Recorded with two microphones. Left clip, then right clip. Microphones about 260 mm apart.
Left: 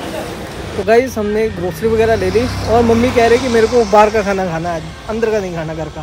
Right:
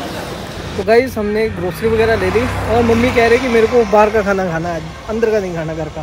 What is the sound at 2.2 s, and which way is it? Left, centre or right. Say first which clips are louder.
Speech: left 1 dB; centre.